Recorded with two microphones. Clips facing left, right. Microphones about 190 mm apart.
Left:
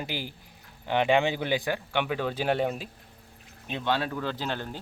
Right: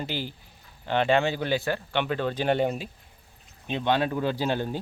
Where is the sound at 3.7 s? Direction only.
20° right (ahead or behind).